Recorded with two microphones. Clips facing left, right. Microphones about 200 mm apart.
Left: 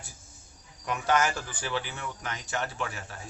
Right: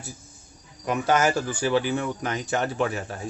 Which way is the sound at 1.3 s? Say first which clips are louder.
Right 10 dB; 40° right (ahead or behind).